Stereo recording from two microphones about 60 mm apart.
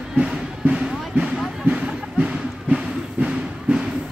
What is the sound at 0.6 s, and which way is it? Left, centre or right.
Music, centre.